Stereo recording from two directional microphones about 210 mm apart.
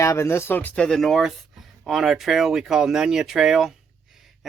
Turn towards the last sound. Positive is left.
turn(degrees=0)  # may be behind; listen again after turning